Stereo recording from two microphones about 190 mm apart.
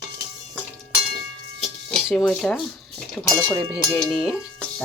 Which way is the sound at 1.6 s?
Centre (ahead or behind).